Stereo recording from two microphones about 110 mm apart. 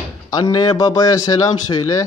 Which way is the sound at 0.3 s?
35° left (ahead or behind).